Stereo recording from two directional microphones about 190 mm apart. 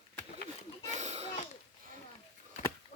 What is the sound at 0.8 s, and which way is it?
Pig, 35° right (ahead or behind).